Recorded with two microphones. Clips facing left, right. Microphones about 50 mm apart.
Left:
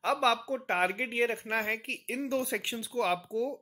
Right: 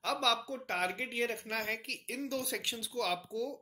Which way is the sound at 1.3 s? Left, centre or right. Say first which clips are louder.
Left 5 dB; left.